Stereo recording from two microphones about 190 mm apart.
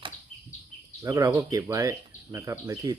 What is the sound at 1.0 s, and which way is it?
Speech, 20° right (ahead or behind).